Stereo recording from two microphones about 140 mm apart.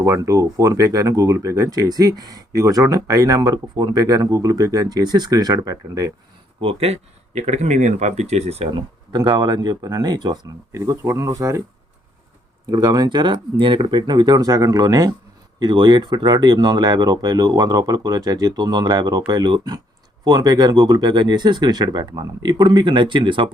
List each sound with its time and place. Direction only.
0.0 s speech: 20° right (ahead or behind)
6.6 s speech: 45° right (ahead or behind)
9.1 s speech: 30° right (ahead or behind)
12.6 s speech: 30° right (ahead or behind)